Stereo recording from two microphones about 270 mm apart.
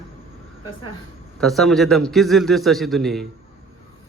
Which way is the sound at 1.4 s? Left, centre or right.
Centre.